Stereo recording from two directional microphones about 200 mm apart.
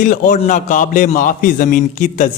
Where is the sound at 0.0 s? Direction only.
40° left (ahead or behind).